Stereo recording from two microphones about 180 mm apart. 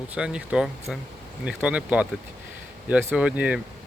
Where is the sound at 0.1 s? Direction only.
5° right (ahead or behind).